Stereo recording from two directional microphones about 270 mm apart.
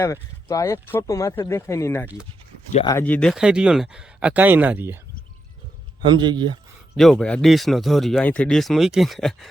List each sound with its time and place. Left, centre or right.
0.0 s speech: centre
6.1 s speech: centre
6.9 s speech: centre